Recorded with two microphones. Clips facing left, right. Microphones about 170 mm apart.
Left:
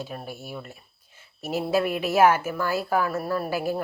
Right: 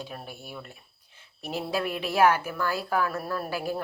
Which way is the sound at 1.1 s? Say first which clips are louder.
Left 5 dB; 45° left (ahead or behind).